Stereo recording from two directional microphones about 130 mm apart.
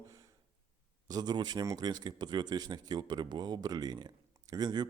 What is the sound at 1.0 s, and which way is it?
Speech, 30° right (ahead or behind).